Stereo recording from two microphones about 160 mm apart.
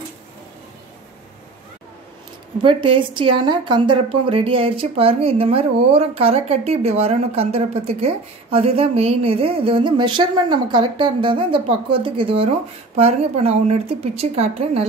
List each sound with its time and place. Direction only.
2.6 s speech: 35° right (ahead or behind)